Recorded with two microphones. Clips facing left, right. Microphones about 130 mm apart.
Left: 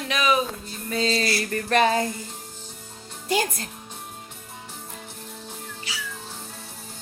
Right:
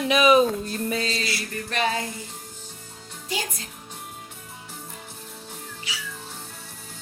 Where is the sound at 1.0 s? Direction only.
30° left (ahead or behind).